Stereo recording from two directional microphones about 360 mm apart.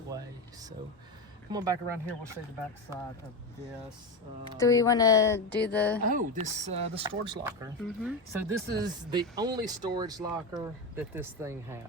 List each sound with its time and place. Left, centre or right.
1.5 s speech: centre
4.5 s a woman's voice: centre
6.1 s speech: right